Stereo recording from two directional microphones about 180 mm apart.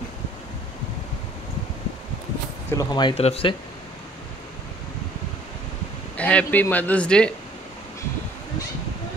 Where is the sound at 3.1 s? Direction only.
35° left (ahead or behind).